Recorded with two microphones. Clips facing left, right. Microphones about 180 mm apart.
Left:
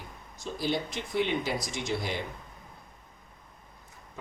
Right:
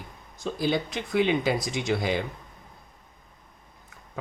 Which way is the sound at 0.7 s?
60° right (ahead or behind).